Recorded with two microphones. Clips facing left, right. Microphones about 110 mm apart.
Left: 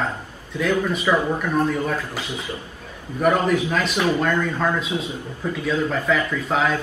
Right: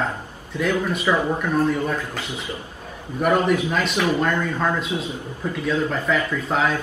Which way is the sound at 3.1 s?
5° right (ahead or behind).